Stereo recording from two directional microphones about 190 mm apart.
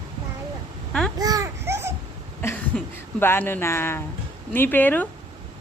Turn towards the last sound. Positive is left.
turn(degrees=10)  # may be behind; listen again after turning